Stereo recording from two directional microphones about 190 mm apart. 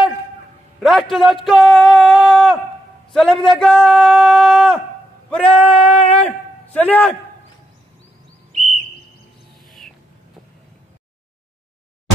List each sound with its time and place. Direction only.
0.7 s a sound: centre (ahead or behind)
3.1 s speech: centre (ahead or behind)
5.8 s speech: 30° left (ahead or behind)
6.2 s a man's voice: 10° left (ahead or behind)
9.7 s rodents: centre (ahead or behind)